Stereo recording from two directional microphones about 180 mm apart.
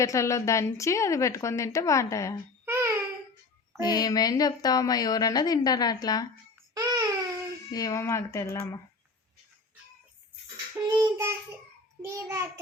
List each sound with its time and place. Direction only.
0.0 s a woman's voice: 15° left (ahead or behind)
2.6 s babbling: 15° right (ahead or behind)
3.8 s a woman's voice: 20° left (ahead or behind)
6.7 s a sound: 25° right (ahead or behind)
7.7 s a woman's voice: 20° left (ahead or behind)
10.9 s child singing: 15° right (ahead or behind)